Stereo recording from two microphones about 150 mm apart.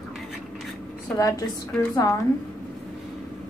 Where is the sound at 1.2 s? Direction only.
25° left (ahead or behind).